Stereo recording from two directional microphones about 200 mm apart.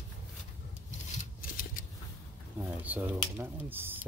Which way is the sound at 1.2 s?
45° left (ahead or behind).